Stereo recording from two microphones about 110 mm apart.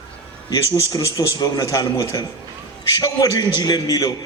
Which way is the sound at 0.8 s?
35° left (ahead or behind).